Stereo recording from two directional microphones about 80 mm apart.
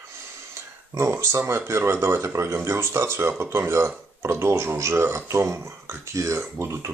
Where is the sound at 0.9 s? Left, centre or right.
Right.